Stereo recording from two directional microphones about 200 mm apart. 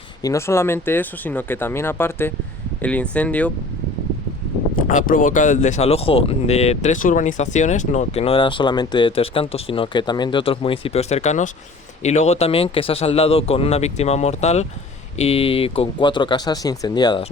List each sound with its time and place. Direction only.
0.2 s speech: 15° left (ahead or behind)
4.9 s speech: 40° left (ahead or behind); by 17.2 s 20° left (ahead or behind)